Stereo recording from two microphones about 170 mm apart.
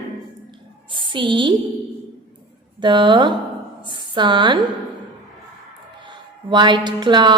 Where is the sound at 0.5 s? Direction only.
30° right (ahead or behind).